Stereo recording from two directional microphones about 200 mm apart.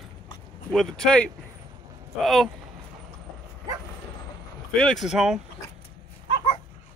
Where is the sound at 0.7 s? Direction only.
Centre (ahead or behind).